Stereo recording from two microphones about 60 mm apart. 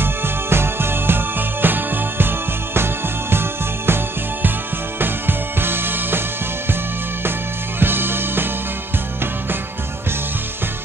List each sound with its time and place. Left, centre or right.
0.0 s music: right
7.8 s music: right